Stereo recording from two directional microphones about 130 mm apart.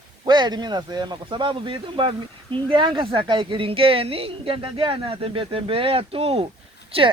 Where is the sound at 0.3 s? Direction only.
35° right (ahead or behind).